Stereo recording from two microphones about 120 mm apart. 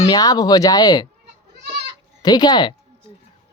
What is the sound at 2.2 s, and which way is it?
Speech, 35° left (ahead or behind).